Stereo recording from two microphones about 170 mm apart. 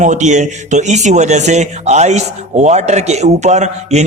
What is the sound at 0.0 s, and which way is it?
Speech, 45° right (ahead or behind).